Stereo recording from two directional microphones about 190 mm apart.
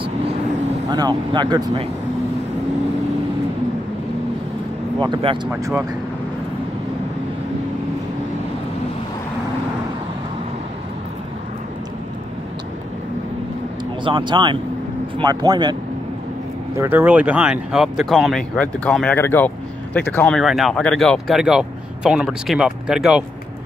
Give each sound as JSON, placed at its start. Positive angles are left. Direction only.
{"t": 0.8, "sound": "speech", "side_deg": -20}
{"t": 5.0, "sound": "speech", "side_deg": -25}
{"t": 14.0, "sound": "speech", "side_deg": -25}
{"t": 16.7, "sound": "speech", "side_deg": -10}